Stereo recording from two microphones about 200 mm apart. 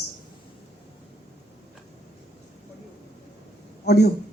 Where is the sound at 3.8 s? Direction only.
55° left (ahead or behind).